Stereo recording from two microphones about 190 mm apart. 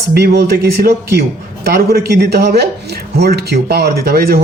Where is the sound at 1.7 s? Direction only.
55° right (ahead or behind).